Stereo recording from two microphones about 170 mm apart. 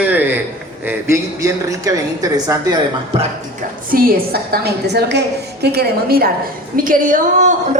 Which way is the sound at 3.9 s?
65° right (ahead or behind).